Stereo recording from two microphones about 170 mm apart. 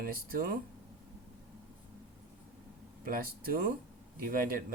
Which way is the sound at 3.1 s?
60° right (ahead or behind).